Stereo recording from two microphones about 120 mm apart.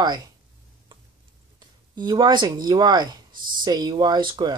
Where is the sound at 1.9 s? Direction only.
35° right (ahead or behind).